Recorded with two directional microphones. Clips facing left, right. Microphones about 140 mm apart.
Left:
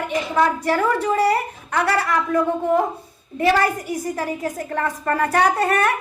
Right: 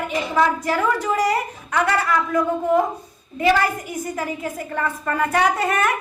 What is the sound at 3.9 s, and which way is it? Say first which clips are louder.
Speech: left 2 dB; 35° left (ahead or behind).